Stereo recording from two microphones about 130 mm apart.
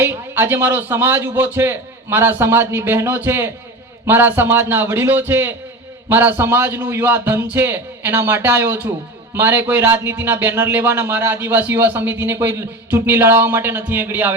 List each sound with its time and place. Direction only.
0.0 s speech: 15° right (ahead or behind)